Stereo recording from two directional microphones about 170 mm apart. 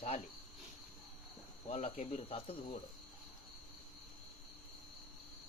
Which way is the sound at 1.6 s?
35° left (ahead or behind).